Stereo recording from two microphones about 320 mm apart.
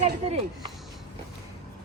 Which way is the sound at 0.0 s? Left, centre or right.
Right.